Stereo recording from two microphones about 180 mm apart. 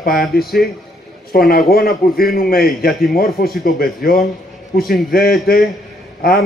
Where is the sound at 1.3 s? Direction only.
55° left (ahead or behind).